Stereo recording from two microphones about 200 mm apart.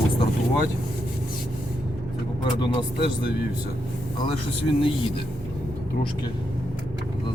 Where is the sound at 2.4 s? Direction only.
25° left (ahead or behind).